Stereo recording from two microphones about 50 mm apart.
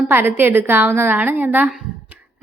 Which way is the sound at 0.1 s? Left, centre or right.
Right.